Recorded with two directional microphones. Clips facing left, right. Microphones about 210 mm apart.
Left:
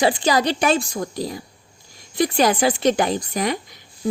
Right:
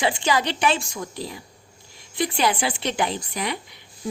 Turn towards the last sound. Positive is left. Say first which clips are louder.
# left 6 dB
turn(degrees=45)  # may be behind; listen again after turning